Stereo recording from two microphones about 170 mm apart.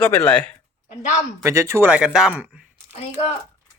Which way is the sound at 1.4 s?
15° right (ahead or behind).